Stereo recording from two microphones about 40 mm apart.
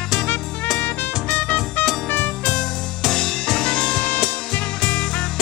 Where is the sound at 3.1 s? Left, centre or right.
Centre.